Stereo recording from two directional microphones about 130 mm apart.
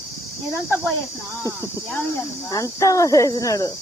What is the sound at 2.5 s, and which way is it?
Speech, 25° left (ahead or behind).